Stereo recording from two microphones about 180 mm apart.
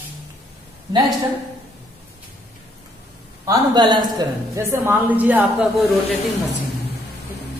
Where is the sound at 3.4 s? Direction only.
20° right (ahead or behind).